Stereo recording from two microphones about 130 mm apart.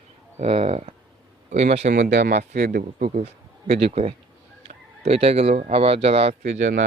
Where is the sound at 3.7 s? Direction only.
50° right (ahead or behind).